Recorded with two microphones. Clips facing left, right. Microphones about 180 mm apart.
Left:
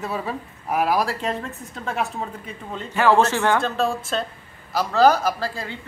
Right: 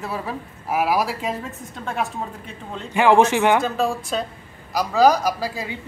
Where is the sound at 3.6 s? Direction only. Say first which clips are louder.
Right 1 dB; centre (ahead or behind).